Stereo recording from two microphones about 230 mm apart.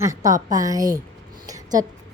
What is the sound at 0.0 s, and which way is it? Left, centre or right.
A woman's voice, centre.